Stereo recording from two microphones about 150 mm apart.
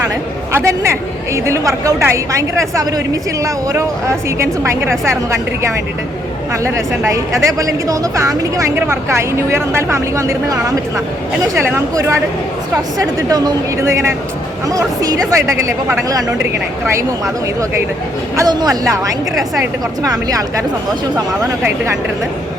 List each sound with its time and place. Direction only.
0.5 s a woman's voice: 20° right (ahead or behind)
16.8 s a woman's voice: 20° right (ahead or behind)